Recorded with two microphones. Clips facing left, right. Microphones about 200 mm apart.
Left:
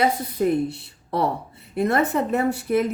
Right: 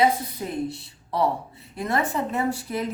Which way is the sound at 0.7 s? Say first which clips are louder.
Left 3 dB; 60° left (ahead or behind).